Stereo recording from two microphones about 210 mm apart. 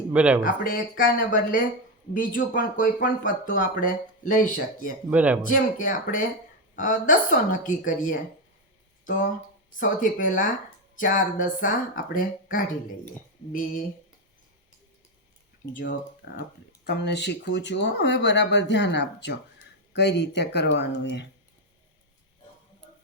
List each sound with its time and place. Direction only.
0.1 s speech: 5° right (ahead or behind)
0.4 s speech: 40° left (ahead or behind)
5.1 s speech: 10° right (ahead or behind)
5.5 s speech: 40° left (ahead or behind)
9.7 s speech: 40° left (ahead or behind)
16.2 s speech: 55° left (ahead or behind)